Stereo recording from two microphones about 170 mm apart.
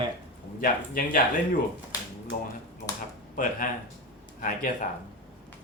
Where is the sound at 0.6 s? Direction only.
55° left (ahead or behind).